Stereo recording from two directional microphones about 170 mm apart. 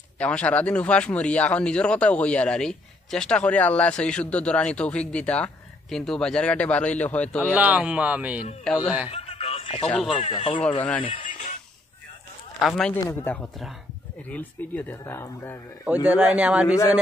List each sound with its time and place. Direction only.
0.2 s speech: 10° left (ahead or behind)
7.5 s speech: 10° right (ahead or behind)
9.1 s music: 35° left (ahead or behind)
9.8 s a man's voice: 5° left (ahead or behind)
10.2 s speech: 40° left (ahead or behind)
12.5 s a man's voice: 5° left (ahead or behind)
16.3 s speech: 5° right (ahead or behind)